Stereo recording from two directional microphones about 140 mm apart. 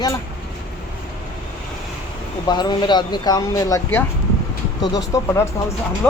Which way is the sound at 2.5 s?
30° left (ahead or behind).